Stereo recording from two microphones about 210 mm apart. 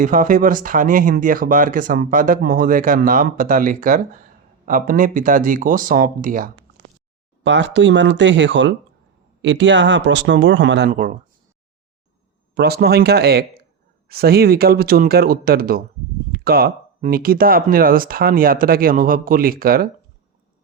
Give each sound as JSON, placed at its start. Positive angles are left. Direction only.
{"t": 0.0, "sound": "speech", "side_deg": -40}
{"t": 7.4, "sound": "speech", "side_deg": -60}
{"t": 12.5, "sound": "speech", "side_deg": -50}